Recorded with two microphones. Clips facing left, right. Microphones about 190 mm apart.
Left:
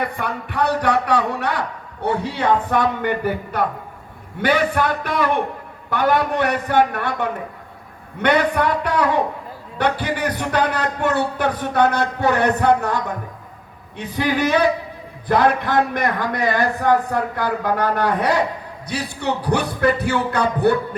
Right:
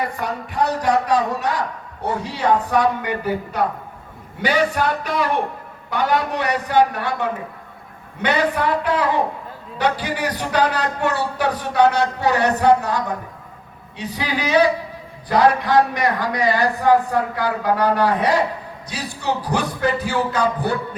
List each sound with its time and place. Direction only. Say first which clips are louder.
0.0 s a man's voice: even; 60° left (ahead or behind)